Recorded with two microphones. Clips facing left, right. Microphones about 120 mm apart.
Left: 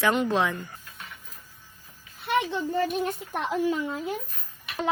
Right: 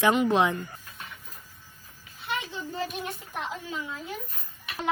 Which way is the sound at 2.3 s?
60° left (ahead or behind).